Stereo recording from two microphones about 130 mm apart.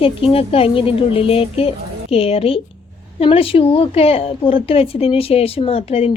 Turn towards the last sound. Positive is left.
turn(degrees=50)  # may be behind; listen again after turning